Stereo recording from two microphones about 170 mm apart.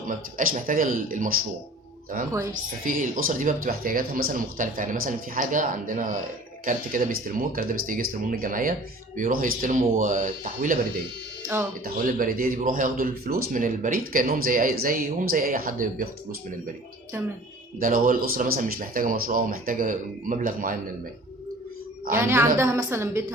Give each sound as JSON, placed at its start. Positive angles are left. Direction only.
{"t": 0.3, "sound": "speech", "side_deg": -50}
{"t": 12.0, "sound": "speech", "side_deg": -55}
{"t": 17.7, "sound": "speech", "side_deg": -55}
{"t": 22.1, "sound": "a woman's voice", "side_deg": -15}